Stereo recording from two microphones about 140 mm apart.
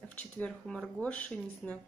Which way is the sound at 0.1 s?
10° left (ahead or behind).